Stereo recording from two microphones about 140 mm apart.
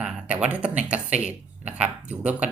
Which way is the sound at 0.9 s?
10° right (ahead or behind).